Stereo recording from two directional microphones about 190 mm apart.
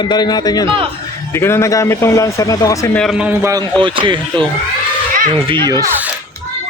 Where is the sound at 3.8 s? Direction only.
25° right (ahead or behind).